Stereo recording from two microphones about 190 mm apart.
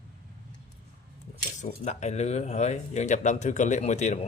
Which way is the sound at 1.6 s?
40° left (ahead or behind).